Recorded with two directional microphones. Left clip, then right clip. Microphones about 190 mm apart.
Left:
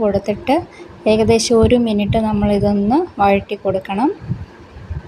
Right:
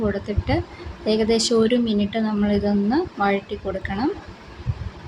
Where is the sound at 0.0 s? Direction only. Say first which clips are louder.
Left 8 dB; 25° left (ahead or behind).